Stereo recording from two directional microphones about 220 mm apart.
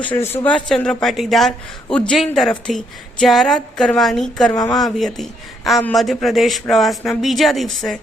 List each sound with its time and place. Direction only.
0.0 s speech: 5° left (ahead or behind)
4.5 s speech: 15° left (ahead or behind)
4.8 s speech: centre (ahead or behind)